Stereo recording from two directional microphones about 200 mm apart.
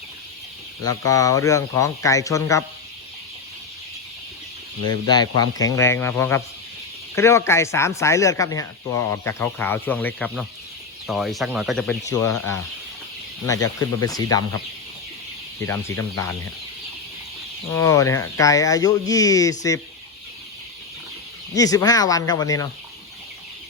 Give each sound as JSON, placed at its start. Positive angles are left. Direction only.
{"t": 0.9, "sound": "speech", "side_deg": 15}
{"t": 4.9, "sound": "speech", "side_deg": 20}
{"t": 12.0, "sound": "speech", "side_deg": 15}
{"t": 15.6, "sound": "speech", "side_deg": 15}
{"t": 17.7, "sound": "speech", "side_deg": 15}
{"t": 21.5, "sound": "speech", "side_deg": 15}